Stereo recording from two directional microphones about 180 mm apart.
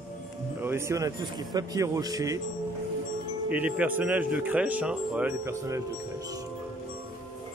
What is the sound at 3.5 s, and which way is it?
Speech, 10° right (ahead or behind).